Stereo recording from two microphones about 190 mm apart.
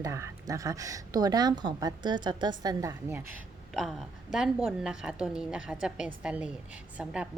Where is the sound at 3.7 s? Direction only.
Centre (ahead or behind).